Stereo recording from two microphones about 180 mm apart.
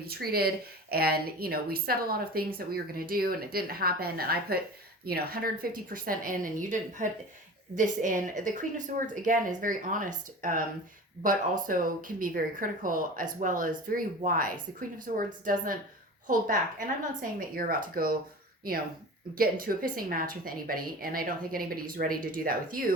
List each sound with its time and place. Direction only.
0.0 s a woman's voice: 60° right (ahead or behind)
19.4 s speech: 55° right (ahead or behind)